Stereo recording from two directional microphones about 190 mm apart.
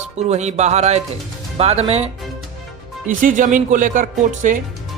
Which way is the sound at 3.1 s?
45° right (ahead or behind).